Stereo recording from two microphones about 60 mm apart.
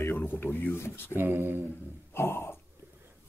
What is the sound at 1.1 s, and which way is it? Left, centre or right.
Speech, right.